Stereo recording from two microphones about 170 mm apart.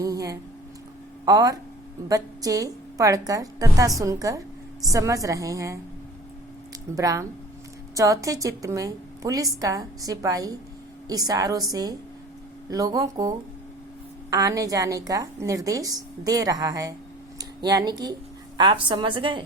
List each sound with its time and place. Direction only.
0.0 s a sound: 20° right (ahead or behind)
1.2 s a woman's voice: 20° right (ahead or behind)
6.9 s a woman's voice: 20° right (ahead or behind)